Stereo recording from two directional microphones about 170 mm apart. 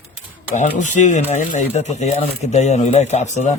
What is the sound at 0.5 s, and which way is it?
Speech, 45° left (ahead or behind).